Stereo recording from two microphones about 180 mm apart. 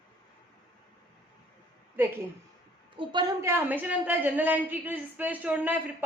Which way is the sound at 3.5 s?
10° right (ahead or behind).